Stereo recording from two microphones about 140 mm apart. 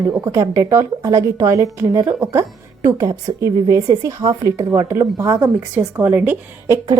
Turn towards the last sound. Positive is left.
turn(degrees=-25)  # may be behind; listen again after turning